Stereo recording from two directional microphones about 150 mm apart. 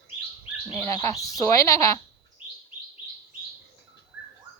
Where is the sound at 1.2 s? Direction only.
20° left (ahead or behind).